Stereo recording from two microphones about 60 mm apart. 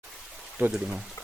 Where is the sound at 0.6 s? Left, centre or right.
Right.